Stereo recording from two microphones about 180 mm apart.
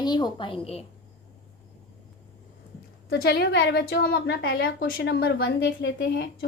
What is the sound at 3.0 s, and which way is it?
A woman's voice, 60° left (ahead or behind).